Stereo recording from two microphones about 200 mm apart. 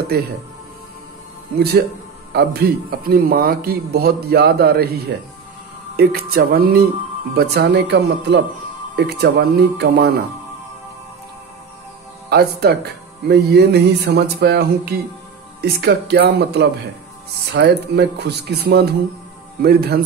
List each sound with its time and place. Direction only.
0.1 s speech: 50° right (ahead or behind)
1.6 s speech: 50° right (ahead or behind)
12.3 s speech: 55° right (ahead or behind)